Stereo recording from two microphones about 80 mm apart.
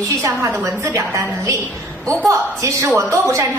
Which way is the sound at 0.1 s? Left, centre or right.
Right.